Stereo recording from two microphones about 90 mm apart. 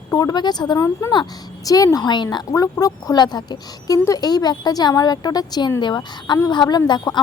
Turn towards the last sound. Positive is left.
turn(degrees=55)  # may be behind; listen again after turning